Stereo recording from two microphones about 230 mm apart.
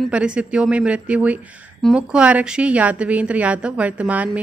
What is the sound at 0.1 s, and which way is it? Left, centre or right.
A woman's voice, centre.